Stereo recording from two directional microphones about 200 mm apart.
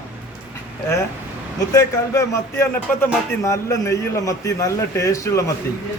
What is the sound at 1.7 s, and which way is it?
A man's voice, 15° left (ahead or behind).